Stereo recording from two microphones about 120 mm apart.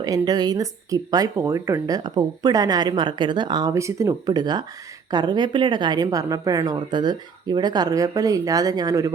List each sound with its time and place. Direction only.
0.0 s speech: 35° right (ahead or behind)